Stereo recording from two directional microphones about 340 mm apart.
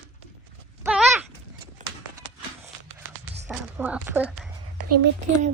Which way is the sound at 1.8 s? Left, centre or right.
Right.